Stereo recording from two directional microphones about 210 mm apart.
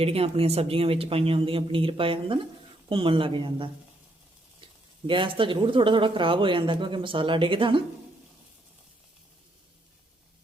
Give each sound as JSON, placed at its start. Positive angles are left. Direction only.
{"t": 0.0, "sound": "speech", "side_deg": -25}
{"t": 5.0, "sound": "speech", "side_deg": -25}